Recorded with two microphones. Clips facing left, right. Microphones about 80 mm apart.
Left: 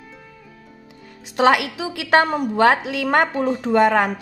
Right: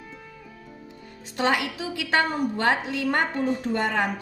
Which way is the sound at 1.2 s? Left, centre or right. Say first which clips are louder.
Left 8 dB; left.